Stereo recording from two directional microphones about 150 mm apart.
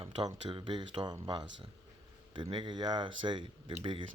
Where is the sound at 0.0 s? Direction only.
30° right (ahead or behind).